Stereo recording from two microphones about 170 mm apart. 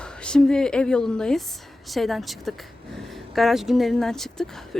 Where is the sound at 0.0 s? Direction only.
5° left (ahead or behind).